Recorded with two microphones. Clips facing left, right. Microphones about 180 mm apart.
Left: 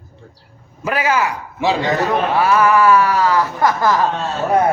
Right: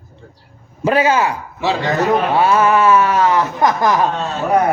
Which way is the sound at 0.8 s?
25° right (ahead or behind).